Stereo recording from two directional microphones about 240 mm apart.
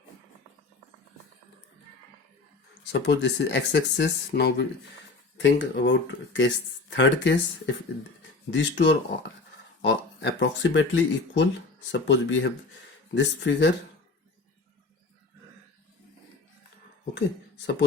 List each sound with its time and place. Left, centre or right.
2.9 s speech: left